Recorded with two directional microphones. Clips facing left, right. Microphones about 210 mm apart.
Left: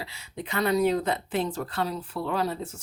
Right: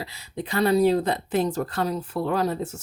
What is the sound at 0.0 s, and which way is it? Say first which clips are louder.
A woman's voice: right 4 dB; 35° right (ahead or behind).